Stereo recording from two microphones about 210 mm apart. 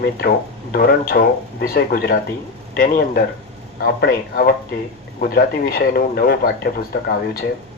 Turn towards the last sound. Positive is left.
turn(degrees=45)  # may be behind; listen again after turning